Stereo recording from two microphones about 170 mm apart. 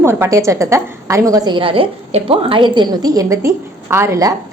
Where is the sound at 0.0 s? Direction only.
15° right (ahead or behind).